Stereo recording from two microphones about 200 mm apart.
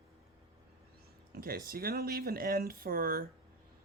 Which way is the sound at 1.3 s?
45° right (ahead or behind).